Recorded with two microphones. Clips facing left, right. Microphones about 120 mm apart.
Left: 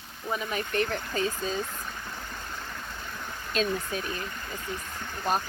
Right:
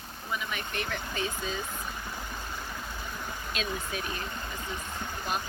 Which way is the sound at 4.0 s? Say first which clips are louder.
Left 1 dB; 20° right (ahead or behind).